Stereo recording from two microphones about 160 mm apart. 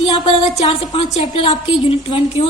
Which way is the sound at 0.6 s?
40° left (ahead or behind).